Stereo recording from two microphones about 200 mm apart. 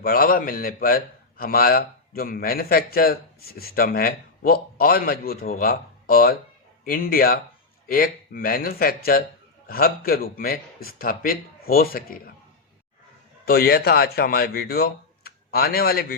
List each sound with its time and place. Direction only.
0.0 s a man's voice: 45° left (ahead or behind)
13.4 s speech: 50° left (ahead or behind)